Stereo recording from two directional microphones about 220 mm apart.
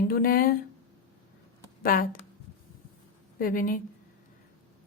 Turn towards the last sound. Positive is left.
turn(degrees=40)  # may be behind; listen again after turning